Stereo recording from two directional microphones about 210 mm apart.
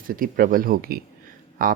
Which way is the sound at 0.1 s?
40° right (ahead or behind).